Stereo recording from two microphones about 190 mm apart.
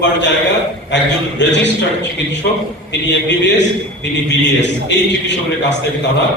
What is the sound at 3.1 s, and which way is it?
A man's voice, 70° left (ahead or behind).